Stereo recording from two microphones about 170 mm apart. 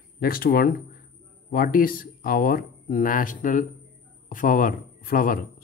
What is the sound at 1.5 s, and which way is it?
Speech, 55° left (ahead or behind).